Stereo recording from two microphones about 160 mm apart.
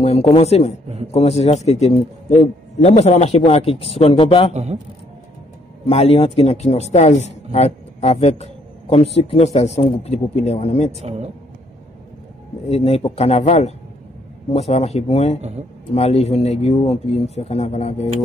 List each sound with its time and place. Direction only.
0.0 s speech: 40° left (ahead or behind)
4.5 s a man's voice: 45° right (ahead or behind)
5.9 s speech: 40° left (ahead or behind)
10.9 s a man's voice: 40° right (ahead or behind)
12.6 s speech: 40° left (ahead or behind)